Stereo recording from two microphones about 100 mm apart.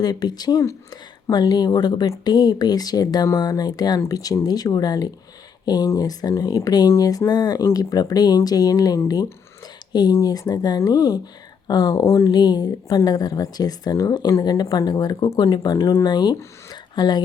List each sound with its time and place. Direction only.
0.0 s speech: 45° left (ahead or behind)
12.3 s speech: 45° left (ahead or behind)
16.7 s a sound: 45° left (ahead or behind)